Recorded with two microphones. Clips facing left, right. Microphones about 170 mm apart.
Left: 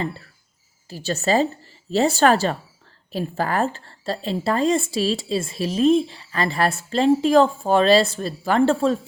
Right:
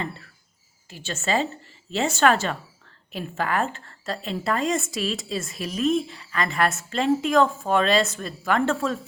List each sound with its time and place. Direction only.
0.9 s a woman's voice: 35° left (ahead or behind)